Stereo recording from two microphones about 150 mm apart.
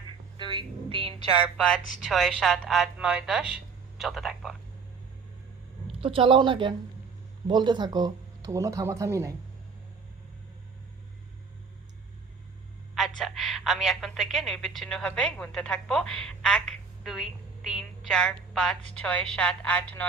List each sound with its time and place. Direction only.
0.3 s music: 35° right (ahead or behind)
1.5 s a woman's voice: 5° left (ahead or behind)
6.0 s speech: 35° right (ahead or behind); by 9.3 s 20° right (ahead or behind)
12.9 s a woman's voice: centre (ahead or behind)